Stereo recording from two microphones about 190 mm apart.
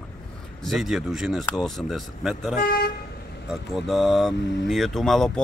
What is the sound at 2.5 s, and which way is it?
Speech, 50° left (ahead or behind).